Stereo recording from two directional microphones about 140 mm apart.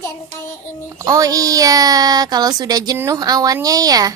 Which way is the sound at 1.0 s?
25° right (ahead or behind).